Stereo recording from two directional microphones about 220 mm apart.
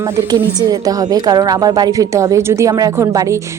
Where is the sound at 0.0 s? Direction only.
15° right (ahead or behind).